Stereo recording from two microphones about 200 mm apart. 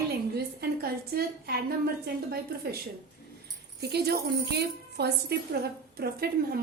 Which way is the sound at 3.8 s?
55° right (ahead or behind).